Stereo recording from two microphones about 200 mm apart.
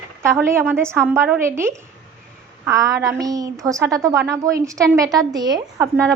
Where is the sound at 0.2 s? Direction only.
10° right (ahead or behind).